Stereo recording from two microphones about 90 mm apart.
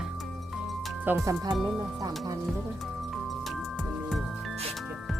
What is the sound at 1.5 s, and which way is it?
Speech, centre (ahead or behind).